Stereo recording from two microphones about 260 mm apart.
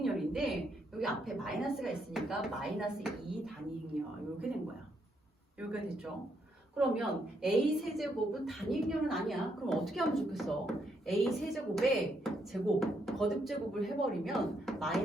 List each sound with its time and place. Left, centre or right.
0.0 s a sound: centre
0.9 s a woman's voice: centre
5.5 s a woman's voice: centre
7.4 s a woman's voice: centre